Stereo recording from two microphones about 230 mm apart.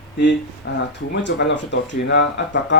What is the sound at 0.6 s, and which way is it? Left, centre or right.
Speech, left.